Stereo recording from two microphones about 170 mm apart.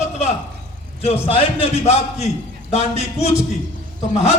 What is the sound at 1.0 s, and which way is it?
A man's voice, 35° left (ahead or behind).